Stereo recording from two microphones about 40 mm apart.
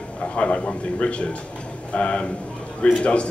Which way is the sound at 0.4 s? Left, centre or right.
Left.